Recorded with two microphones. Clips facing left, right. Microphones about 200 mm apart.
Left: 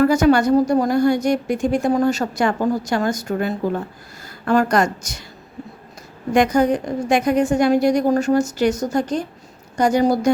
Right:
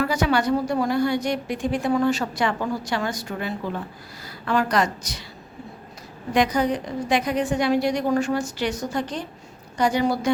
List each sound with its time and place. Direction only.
0.0 s a woman's voice: 45° left (ahead or behind)
6.3 s a woman's voice: 45° left (ahead or behind)